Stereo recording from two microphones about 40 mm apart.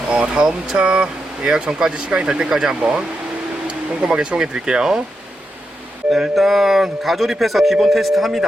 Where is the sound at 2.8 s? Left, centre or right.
Right; by 5.0 s centre.